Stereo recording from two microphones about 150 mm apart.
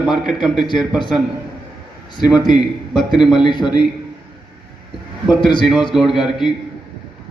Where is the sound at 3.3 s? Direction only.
30° left (ahead or behind).